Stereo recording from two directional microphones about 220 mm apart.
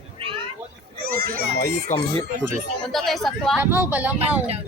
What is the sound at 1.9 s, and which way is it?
Speech, 35° left (ahead or behind).